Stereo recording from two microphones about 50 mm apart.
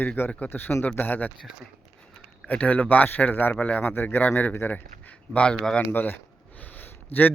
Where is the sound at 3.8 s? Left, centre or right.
Left.